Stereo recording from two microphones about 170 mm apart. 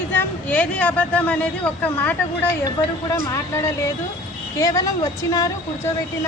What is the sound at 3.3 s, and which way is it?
A woman's voice, 20° left (ahead or behind).